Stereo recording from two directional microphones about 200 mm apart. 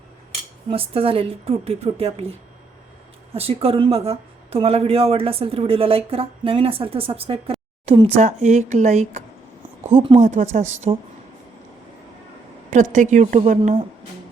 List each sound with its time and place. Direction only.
0.7 s a woman's voice: 30° right (ahead or behind)
3.3 s a woman's voice: 30° right (ahead or behind)
12.7 s a woman's voice: 40° right (ahead or behind)
13.6 s speech: 25° right (ahead or behind)